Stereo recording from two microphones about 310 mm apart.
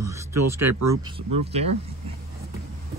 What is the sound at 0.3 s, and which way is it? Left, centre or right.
Speech, right.